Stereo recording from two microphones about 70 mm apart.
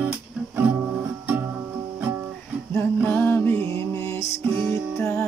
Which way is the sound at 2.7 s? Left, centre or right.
Left.